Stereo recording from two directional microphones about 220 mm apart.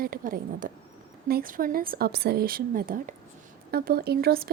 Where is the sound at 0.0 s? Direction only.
40° right (ahead or behind).